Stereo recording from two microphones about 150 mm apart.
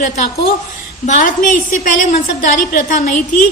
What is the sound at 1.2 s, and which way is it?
A woman's voice, 60° left (ahead or behind).